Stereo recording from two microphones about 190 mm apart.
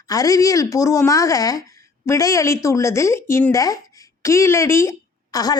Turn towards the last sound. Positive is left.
turn(degrees=20)  # may be behind; listen again after turning